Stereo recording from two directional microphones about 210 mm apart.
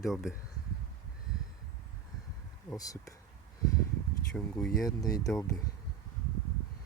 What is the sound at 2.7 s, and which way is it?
Speech, 15° left (ahead or behind).